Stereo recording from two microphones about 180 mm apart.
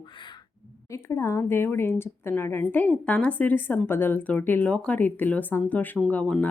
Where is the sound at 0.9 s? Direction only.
15° left (ahead or behind).